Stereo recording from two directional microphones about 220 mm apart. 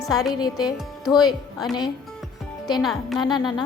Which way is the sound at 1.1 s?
20° left (ahead or behind).